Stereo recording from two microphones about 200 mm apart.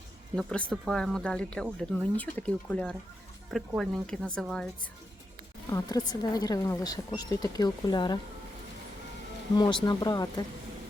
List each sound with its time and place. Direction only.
0.3 s speech: 5° left (ahead or behind)
5.7 s speech: 20° left (ahead or behind)
9.6 s speech: 20° left (ahead or behind)